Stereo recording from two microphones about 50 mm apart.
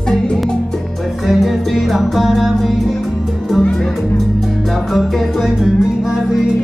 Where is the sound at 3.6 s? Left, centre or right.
Centre.